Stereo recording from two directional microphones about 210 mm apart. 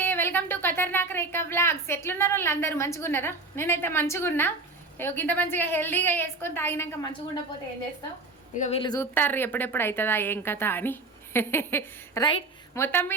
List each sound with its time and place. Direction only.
0.0 s a woman's voice: 10° left (ahead or behind)
8.5 s speech: 35° left (ahead or behind)
8.8 s a woman's voice: 15° left (ahead or behind)